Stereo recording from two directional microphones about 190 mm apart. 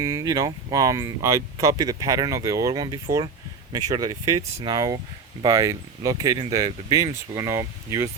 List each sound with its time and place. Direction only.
0.0 s speech: 15° right (ahead or behind)